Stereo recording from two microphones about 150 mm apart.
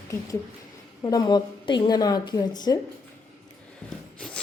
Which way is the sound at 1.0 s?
25° left (ahead or behind).